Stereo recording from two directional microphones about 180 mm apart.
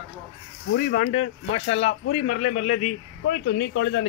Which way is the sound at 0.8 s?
50° left (ahead or behind).